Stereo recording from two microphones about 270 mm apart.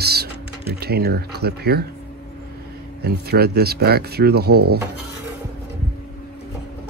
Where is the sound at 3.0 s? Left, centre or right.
Right.